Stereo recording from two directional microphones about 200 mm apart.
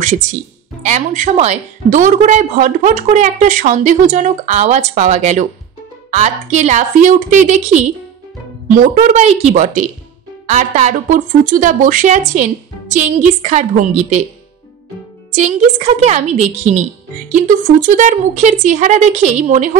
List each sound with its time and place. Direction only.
0.0 s a woman's voice: 40° right (ahead or behind)
15.3 s a woman's voice: 40° right (ahead or behind)